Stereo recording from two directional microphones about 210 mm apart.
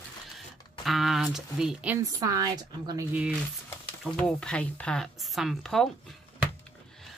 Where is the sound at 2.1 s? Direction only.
15° right (ahead or behind).